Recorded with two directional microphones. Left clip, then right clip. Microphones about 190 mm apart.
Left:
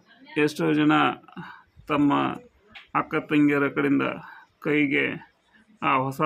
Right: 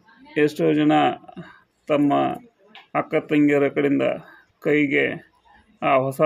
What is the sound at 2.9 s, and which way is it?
Speech, 5° right (ahead or behind).